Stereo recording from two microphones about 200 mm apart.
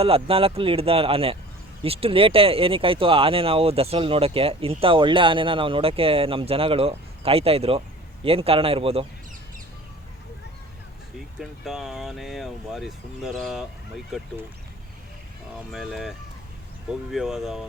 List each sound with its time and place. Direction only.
0.0 s speech: 30° right (ahead or behind)
11.3 s speech: centre (ahead or behind)
15.7 s speech: centre (ahead or behind)